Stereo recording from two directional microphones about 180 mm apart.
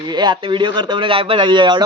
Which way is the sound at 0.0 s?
25° right (ahead or behind).